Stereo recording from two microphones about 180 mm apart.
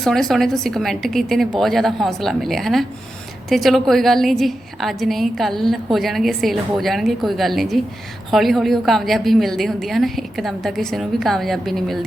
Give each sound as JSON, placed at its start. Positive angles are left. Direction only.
{"t": 0.0, "sound": "a woman's voice", "side_deg": 0}